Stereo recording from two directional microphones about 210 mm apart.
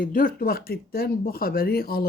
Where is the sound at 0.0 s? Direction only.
40° left (ahead or behind).